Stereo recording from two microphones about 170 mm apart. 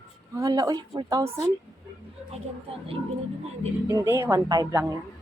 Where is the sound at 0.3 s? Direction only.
20° right (ahead or behind).